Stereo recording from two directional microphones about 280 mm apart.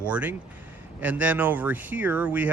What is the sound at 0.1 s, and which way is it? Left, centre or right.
Speech, centre.